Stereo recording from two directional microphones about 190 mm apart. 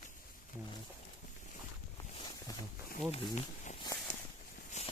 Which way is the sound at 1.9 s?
20° left (ahead or behind).